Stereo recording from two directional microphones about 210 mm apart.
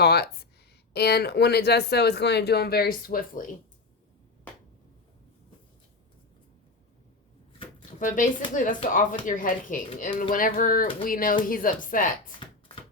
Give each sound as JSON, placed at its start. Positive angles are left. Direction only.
{"t": 0.0, "sound": "speech", "side_deg": 50}
{"t": 7.9, "sound": "speech", "side_deg": 40}